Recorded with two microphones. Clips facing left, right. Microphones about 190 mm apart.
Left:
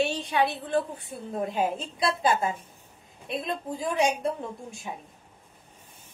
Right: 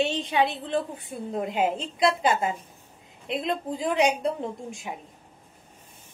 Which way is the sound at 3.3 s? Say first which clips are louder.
Right 3 dB; 20° right (ahead or behind).